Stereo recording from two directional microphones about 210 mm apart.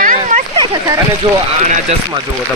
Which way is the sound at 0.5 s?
20° right (ahead or behind).